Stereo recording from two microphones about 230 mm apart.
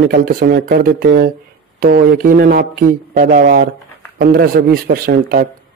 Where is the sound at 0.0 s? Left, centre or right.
Right.